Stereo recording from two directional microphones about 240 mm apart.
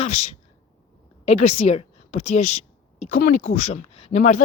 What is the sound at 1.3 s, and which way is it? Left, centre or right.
Speech, left.